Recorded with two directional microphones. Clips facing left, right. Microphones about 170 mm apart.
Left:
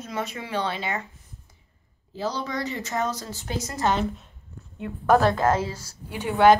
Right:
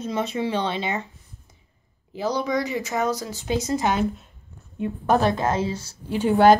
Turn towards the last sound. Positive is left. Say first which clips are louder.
# right 2 dB
turn(degrees=-35)  # may be behind; listen again after turning